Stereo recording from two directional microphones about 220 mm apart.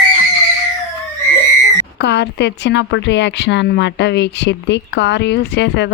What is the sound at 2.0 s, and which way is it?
Speech, 50° left (ahead or behind).